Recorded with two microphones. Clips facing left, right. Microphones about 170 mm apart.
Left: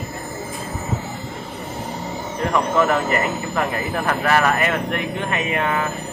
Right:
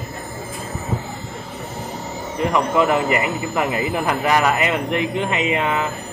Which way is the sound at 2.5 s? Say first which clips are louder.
Right 1 dB; 15° right (ahead or behind).